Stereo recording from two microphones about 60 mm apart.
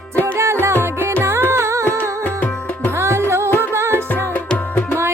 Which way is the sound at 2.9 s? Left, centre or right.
Right.